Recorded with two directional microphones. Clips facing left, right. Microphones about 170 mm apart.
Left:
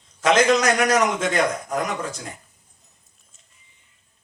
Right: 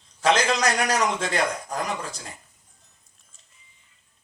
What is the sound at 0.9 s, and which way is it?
Speech, 30° right (ahead or behind).